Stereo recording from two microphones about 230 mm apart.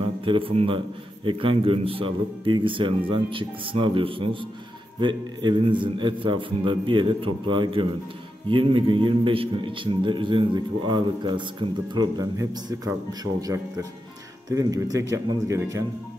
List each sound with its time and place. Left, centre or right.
0.2 s speech: right